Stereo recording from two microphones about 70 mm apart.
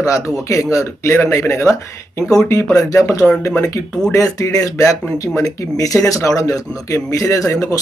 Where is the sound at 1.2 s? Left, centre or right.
Left.